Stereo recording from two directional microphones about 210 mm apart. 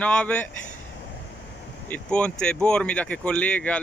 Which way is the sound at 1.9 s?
5° left (ahead or behind).